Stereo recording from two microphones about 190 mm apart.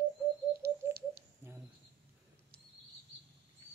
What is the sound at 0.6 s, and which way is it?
Bird, 55° right (ahead or behind).